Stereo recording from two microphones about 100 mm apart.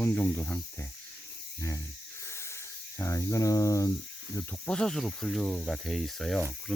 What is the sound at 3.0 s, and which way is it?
Speech, 30° left (ahead or behind).